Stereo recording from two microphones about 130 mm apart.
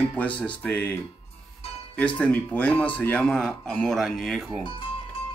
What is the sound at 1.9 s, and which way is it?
Speech, 10° left (ahead or behind).